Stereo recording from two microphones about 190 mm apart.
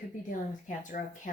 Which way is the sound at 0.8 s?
40° left (ahead or behind).